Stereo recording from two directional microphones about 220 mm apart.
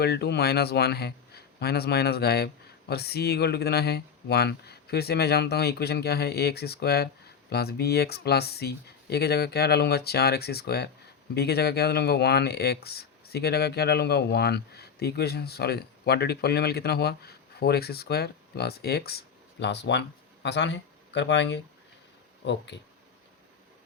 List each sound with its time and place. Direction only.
0.0 s speech: 45° left (ahead or behind)
22.7 s speech: 50° left (ahead or behind)